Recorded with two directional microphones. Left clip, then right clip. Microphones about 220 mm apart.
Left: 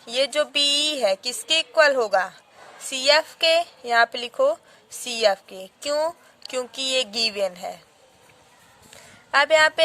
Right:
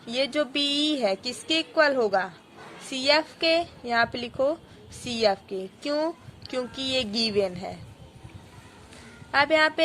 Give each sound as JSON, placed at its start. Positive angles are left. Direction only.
{"t": 0.0, "sound": "a woman's voice", "side_deg": 45}
{"t": 9.3, "sound": "a woman's voice", "side_deg": 45}